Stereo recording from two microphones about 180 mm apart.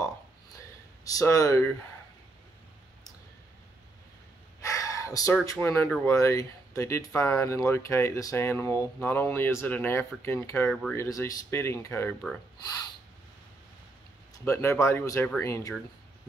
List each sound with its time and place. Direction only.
1.1 s speech: 15° left (ahead or behind)
4.6 s gasp: 15° left (ahead or behind)
5.4 s speech: 15° left (ahead or behind)
11.0 s speech: 20° left (ahead or behind)
14.4 s speech: 15° left (ahead or behind)